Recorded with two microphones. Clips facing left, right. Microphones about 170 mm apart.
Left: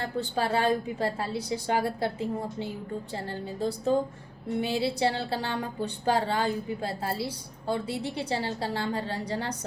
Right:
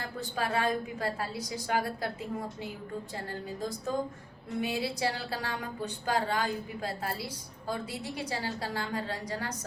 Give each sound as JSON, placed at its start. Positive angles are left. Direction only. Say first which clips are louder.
{"t": 0.0, "sound": "a woman's voice", "louder": "left 5 dB", "side_deg": 30}